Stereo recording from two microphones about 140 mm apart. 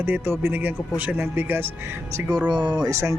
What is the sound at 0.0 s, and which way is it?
Speech, 15° right (ahead or behind).